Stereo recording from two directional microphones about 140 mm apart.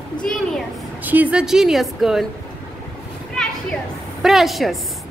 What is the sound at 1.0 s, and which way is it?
A woman's voice, 10° right (ahead or behind).